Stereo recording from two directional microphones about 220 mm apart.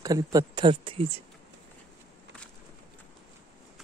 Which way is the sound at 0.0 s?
15° right (ahead or behind).